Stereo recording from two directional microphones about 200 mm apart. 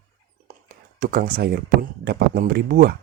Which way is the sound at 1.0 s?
50° right (ahead or behind).